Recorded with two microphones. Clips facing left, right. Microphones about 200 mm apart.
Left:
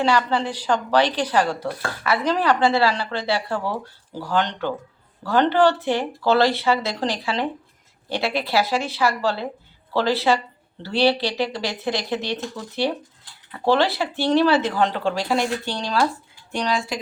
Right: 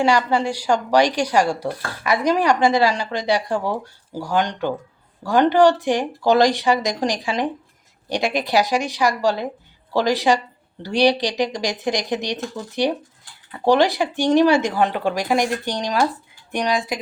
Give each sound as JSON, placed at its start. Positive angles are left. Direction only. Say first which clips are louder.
{"t": 0.0, "sound": "a woman's voice", "louder": "right 2 dB", "side_deg": -10}